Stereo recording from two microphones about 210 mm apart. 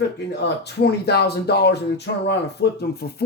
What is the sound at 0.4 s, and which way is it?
Speech, 50° left (ahead or behind).